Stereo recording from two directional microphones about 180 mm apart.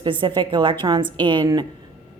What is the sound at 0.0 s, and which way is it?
A woman's voice, 30° right (ahead or behind).